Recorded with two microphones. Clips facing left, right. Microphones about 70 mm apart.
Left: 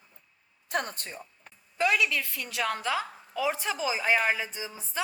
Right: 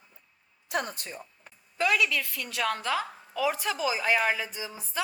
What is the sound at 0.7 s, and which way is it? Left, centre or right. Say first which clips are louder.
Speech: even; left.